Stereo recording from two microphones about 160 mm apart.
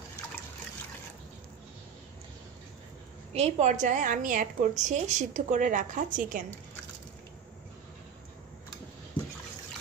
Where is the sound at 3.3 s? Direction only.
40° right (ahead or behind).